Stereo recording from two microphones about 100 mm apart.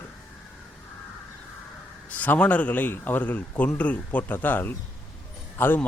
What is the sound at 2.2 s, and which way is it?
A man's voice, 15° left (ahead or behind).